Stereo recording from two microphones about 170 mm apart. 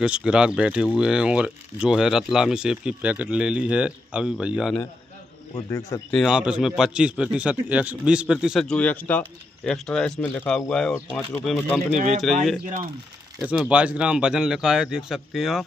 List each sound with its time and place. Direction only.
0.0 s speech: 5° right (ahead or behind)
5.7 s speech: 20° left (ahead or behind)
6.1 s speech: 5° right (ahead or behind)
11.9 s speech: 40° right (ahead or behind)
13.4 s speech: 5° right (ahead or behind)